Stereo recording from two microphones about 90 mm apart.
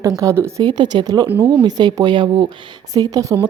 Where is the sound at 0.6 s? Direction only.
55° right (ahead or behind).